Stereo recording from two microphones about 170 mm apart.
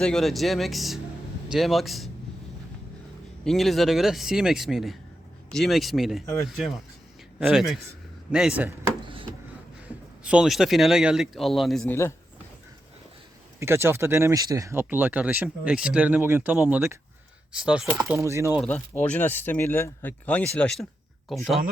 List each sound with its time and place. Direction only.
0.0 s speech: 5° left (ahead or behind)
3.4 s speech: centre (ahead or behind)
9.0 s a sound: 30° right (ahead or behind)
10.2 s speech: 5° right (ahead or behind)
11.9 s speech: 15° left (ahead or behind)
13.6 s speech: 15° right (ahead or behind)
17.9 s speech: 15° right (ahead or behind)
18.6 s speech: 10° left (ahead or behind)